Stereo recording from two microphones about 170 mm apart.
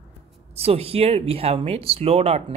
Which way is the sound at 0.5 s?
35° right (ahead or behind).